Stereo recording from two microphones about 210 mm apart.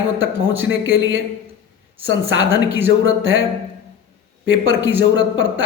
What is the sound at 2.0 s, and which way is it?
Speech, 65° right (ahead or behind).